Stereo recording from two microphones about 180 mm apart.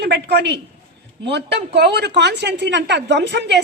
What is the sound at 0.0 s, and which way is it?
A man's voice, 65° right (ahead or behind).